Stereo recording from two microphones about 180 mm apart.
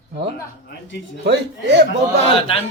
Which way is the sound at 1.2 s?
70° right (ahead or behind).